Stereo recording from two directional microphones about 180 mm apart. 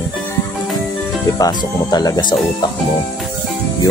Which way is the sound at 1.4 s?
20° left (ahead or behind).